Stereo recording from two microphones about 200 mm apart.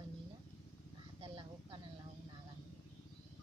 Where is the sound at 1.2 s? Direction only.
25° right (ahead or behind).